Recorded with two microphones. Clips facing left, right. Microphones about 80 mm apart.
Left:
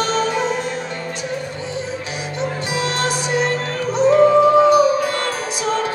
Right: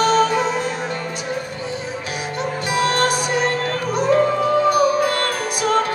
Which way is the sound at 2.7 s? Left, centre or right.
Right.